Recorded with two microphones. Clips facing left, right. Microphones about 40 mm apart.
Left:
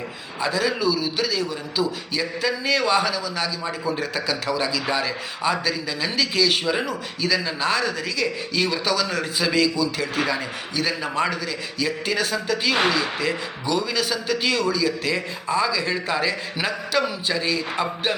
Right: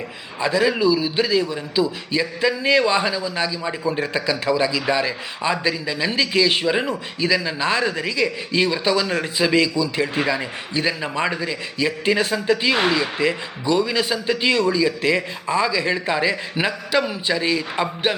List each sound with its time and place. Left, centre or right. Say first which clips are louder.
0.4 s a man's voice: right 4 dB; centre